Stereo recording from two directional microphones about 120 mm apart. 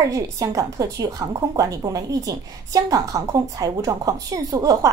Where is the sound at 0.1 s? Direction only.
30° right (ahead or behind).